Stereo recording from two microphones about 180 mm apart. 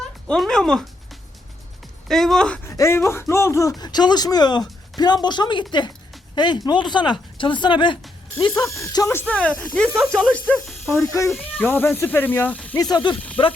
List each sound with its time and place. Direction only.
0.3 s speech: centre (ahead or behind)
2.0 s speech: centre (ahead or behind)
2.6 s speech: 15° left (ahead or behind)
11.3 s speech: centre (ahead or behind)
11.6 s speech: 10° left (ahead or behind)
12.8 s speech: 25° left (ahead or behind)